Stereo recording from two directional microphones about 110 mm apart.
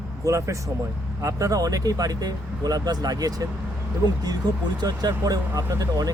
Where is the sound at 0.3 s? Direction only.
30° right (ahead or behind).